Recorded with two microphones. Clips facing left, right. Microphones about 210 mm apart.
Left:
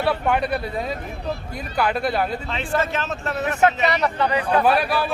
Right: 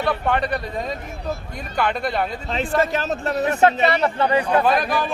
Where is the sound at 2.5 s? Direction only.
40° right (ahead or behind).